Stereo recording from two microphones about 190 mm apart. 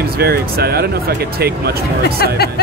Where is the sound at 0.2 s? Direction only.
55° right (ahead or behind).